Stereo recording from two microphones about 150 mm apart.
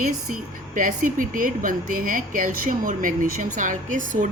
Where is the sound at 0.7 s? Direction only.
65° right (ahead or behind).